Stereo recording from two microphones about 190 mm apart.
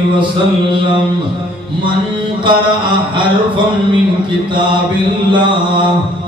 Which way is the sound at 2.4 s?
25° right (ahead or behind).